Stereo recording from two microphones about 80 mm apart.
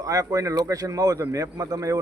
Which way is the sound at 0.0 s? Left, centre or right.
Right.